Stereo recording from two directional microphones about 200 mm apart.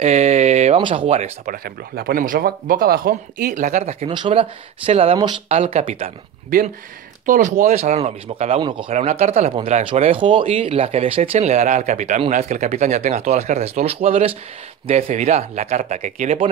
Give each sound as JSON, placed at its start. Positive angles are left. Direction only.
{"t": 0.0, "sound": "speech", "side_deg": -35}
{"t": 1.4, "sound": "speech", "side_deg": -45}
{"t": 7.2, "sound": "speech", "side_deg": -40}
{"t": 8.9, "sound": "speech", "side_deg": -35}